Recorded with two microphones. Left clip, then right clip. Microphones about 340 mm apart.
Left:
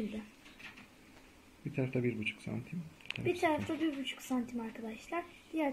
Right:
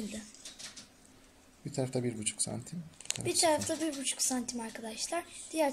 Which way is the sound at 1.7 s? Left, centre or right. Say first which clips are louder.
Right 1 dB; right.